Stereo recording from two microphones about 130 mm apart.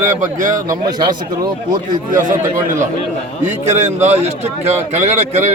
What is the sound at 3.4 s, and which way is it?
A man's voice, 60° right (ahead or behind).